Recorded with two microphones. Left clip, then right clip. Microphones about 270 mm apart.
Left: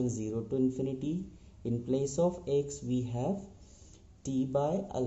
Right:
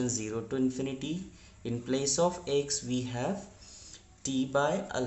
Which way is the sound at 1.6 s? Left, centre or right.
Centre.